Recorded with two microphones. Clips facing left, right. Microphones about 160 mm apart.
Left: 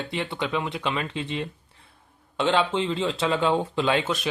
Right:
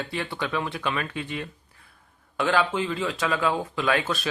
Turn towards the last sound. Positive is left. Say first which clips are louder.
# left 1 dB
turn(degrees=20)  # may be behind; listen again after turning